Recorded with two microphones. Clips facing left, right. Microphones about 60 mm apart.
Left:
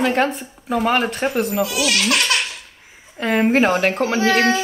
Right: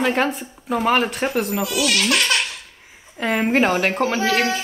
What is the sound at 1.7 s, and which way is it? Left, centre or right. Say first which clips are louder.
Speech: even; left.